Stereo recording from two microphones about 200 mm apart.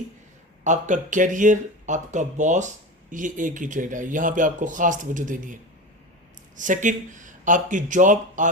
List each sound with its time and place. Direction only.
0.6 s speech: 40° right (ahead or behind)
6.6 s speech: 40° right (ahead or behind)